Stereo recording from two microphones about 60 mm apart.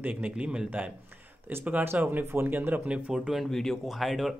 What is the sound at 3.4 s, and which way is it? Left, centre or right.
Speech, centre.